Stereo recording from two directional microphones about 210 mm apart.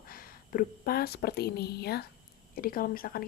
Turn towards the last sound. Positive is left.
turn(degrees=45)  # may be behind; listen again after turning